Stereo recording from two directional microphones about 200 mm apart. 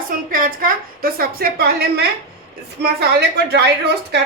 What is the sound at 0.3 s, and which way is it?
A woman's voice, 45° right (ahead or behind).